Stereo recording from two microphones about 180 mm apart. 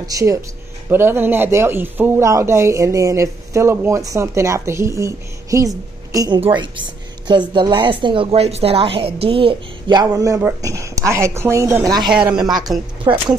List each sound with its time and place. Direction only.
0.0 s a man's voice: 20° right (ahead or behind)
12.1 s speech: 5° right (ahead or behind)
13.0 s speech: 20° right (ahead or behind)